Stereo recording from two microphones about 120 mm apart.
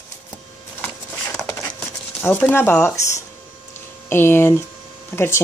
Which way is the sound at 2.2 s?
20° left (ahead or behind).